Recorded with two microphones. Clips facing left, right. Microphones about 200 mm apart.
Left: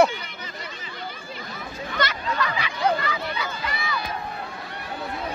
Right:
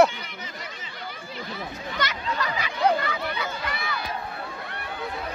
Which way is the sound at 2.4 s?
45° right (ahead or behind).